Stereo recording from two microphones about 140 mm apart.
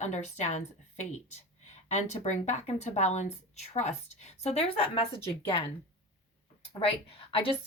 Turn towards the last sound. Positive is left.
turn(degrees=40)  # may be behind; listen again after turning